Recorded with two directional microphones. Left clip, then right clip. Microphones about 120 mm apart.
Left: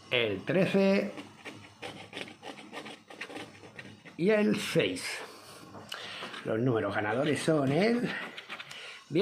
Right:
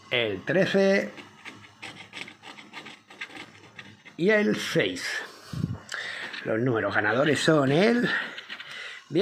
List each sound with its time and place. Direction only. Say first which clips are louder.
0.1 s speech: right 3 dB; 15° right (ahead or behind)
1.4 s wood: right 2 dB; 25° left (ahead or behind)
4.2 s speech: right 4 dB; 20° right (ahead or behind)
5.9 s a sound: right 6 dB; 10° right (ahead or behind)
6.4 s speech: right 4 dB; 15° right (ahead or behind); by 8.2 s 40° right (ahead or behind)
9.1 s a sound: right 4 dB; 10° right (ahead or behind)